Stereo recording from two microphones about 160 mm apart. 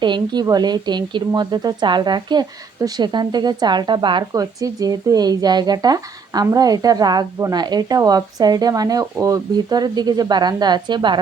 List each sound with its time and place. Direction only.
0.0 s speech: 25° right (ahead or behind)